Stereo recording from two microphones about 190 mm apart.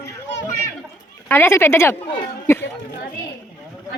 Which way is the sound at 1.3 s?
15° left (ahead or behind).